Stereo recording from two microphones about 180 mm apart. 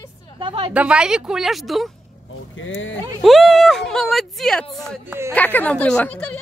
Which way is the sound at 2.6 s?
90° left.